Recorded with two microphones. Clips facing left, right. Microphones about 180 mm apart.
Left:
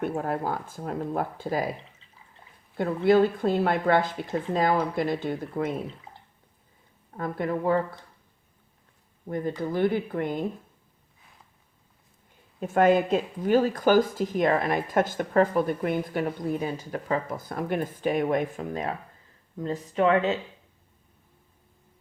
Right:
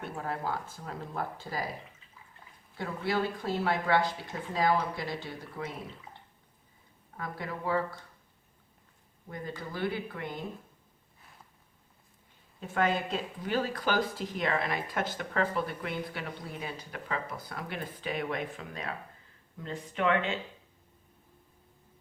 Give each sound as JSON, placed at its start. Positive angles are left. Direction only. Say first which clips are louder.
{"t": 0.0, "sound": "speech", "louder": "left 7 dB", "side_deg": 50}
{"t": 2.7, "sound": "speech", "louder": "left 11 dB", "side_deg": 50}
{"t": 7.2, "sound": "speech", "louder": "left 10 dB", "side_deg": 55}
{"t": 9.7, "sound": "speech", "louder": "left 9 dB", "side_deg": 50}
{"t": 12.5, "sound": "speech", "louder": "left 9 dB", "side_deg": 50}